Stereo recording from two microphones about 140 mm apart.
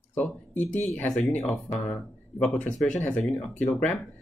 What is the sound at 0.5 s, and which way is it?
Speech, 60° left (ahead or behind).